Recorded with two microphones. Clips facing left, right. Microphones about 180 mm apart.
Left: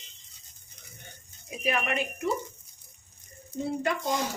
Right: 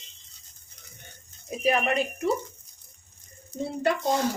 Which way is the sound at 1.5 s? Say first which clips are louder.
Right 5 dB; 35° right (ahead or behind).